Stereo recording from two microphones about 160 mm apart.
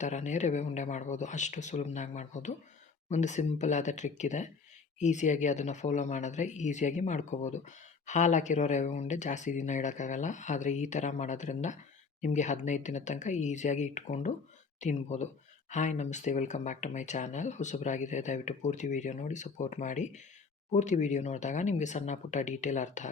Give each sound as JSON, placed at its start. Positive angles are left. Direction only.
{"t": 0.0, "sound": "speech", "side_deg": 50}